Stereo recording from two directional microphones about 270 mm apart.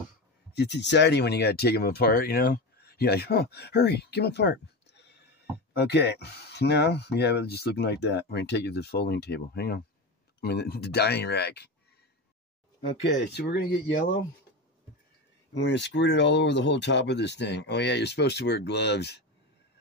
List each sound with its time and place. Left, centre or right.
0.6 s speech: left
13.0 s speech: left
15.6 s speech: left